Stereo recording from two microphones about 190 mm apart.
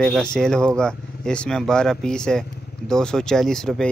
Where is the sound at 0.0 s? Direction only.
5° left (ahead or behind).